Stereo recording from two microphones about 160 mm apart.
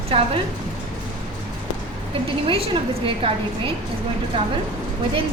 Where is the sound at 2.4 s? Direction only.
35° right (ahead or behind).